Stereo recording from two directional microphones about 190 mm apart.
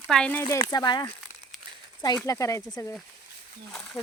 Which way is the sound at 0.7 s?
20° left (ahead or behind).